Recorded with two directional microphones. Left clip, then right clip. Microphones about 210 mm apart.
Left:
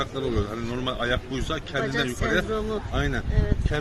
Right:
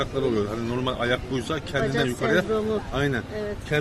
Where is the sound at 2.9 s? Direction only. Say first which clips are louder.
Right 2 dB; centre (ahead or behind).